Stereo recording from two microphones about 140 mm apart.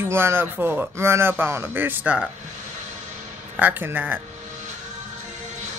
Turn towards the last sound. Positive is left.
turn(degrees=-15)  # may be behind; listen again after turning